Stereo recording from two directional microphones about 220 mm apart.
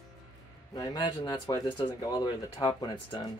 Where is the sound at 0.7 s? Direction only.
20° left (ahead or behind).